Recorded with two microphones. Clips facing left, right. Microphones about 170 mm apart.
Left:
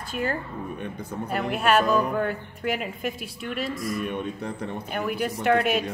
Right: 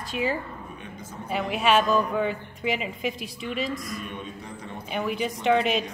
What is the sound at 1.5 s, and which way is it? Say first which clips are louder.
A woman's voice: even; centre (ahead or behind).